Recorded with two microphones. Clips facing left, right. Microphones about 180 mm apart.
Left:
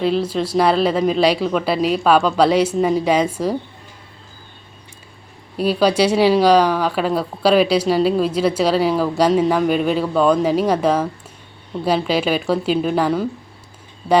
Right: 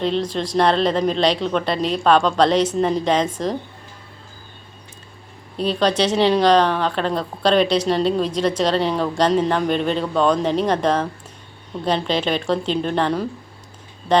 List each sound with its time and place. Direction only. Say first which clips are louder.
0.0 s speech: left 3 dB; 5° left (ahead or behind)
5.5 s speech: left 3 dB; 10° left (ahead or behind)
14.0 s speech: left 2 dB; 25° left (ahead or behind)